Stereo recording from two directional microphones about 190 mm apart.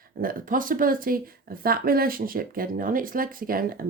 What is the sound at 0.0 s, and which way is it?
Speech, 50° right (ahead or behind).